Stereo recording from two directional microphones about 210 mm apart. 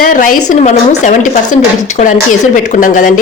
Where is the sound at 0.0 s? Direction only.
40° left (ahead or behind).